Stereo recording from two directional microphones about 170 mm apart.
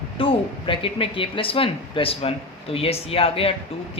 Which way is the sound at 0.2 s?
30° left (ahead or behind).